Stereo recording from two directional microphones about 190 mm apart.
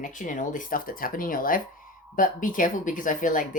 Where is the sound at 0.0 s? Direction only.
45° left (ahead or behind).